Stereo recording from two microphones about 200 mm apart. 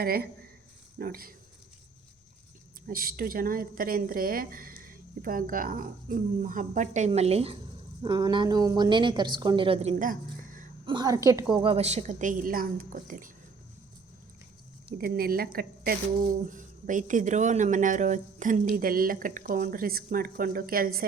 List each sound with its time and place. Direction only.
0.0 s a woman's voice: 50° right (ahead or behind)
2.8 s a woman's voice: 45° right (ahead or behind); by 9.9 s 25° right (ahead or behind)
10.0 s a sound: 40° right (ahead or behind)
10.8 s a woman's voice: 20° right (ahead or behind)
11.5 s a woman's voice: 25° right (ahead or behind); by 13.3 s 45° right (ahead or behind)
14.9 s a woman's voice: 50° right (ahead or behind)